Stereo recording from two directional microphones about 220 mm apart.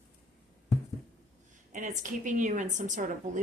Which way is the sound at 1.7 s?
35° right (ahead or behind).